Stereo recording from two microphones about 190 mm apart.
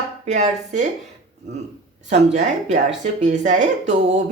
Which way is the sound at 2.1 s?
35° right (ahead or behind).